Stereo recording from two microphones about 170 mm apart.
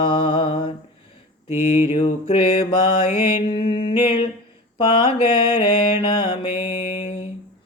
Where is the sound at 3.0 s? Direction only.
15° right (ahead or behind).